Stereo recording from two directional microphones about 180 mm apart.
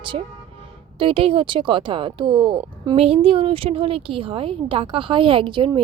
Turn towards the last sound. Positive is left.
turn(degrees=-25)  # may be behind; listen again after turning